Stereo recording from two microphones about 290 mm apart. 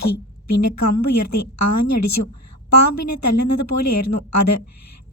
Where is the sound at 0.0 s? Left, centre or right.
Left.